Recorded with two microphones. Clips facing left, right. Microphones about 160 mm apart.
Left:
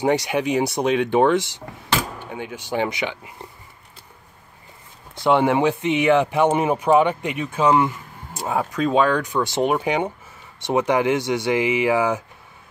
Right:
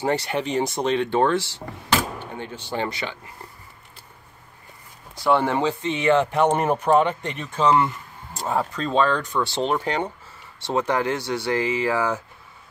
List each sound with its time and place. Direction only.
0.0 s speech: 15° left (ahead or behind)
5.1 s speech: 20° left (ahead or behind)